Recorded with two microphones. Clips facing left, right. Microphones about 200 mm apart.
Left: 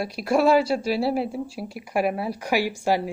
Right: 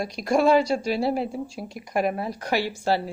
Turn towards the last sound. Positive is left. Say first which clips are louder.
# left 1 dB
turn(degrees=15)  # may be behind; listen again after turning